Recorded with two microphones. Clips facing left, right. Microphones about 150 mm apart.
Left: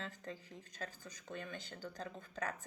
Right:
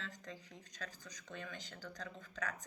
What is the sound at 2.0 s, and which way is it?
Speech, 30° left (ahead or behind).